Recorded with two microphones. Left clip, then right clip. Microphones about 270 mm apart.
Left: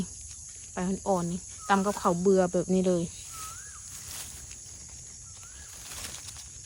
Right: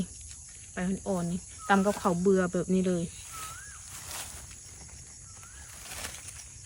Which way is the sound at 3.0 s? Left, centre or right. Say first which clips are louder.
Left 2 dB; centre.